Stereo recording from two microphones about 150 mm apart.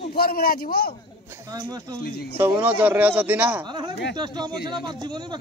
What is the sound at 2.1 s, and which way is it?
Speech, 90° left.